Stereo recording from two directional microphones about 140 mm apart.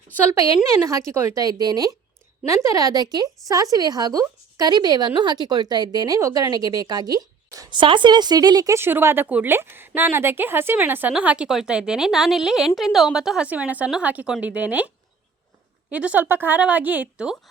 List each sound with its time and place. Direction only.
0.3 s a woman's voice: 25° right (ahead or behind)
15.9 s speech: 10° right (ahead or behind)